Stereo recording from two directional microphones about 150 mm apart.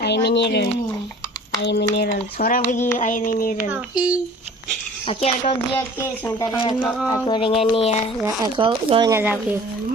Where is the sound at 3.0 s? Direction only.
65° left (ahead or behind).